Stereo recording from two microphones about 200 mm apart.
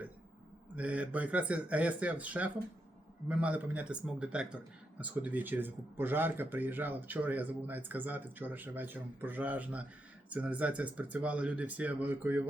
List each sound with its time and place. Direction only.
0.8 s speech: 5° right (ahead or behind)